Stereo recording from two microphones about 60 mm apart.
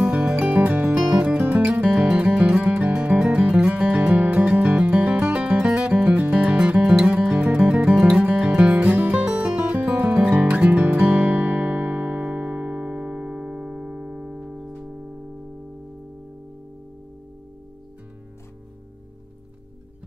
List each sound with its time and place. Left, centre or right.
0.0 s music: centre
6.4 s music: centre
7.9 s music: centre